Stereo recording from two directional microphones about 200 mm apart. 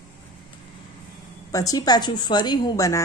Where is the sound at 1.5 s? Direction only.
15° left (ahead or behind).